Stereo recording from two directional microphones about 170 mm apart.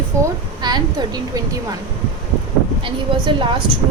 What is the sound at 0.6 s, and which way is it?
Speech, 25° right (ahead or behind).